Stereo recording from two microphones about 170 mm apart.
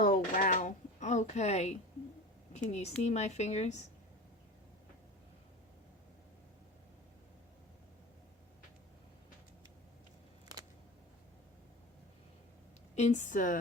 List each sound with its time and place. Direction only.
0.0 s a sound: 55° left (ahead or behind)
2.5 s a woman's voice: 40° left (ahead or behind)
13.0 s a woman's voice: 45° left (ahead or behind)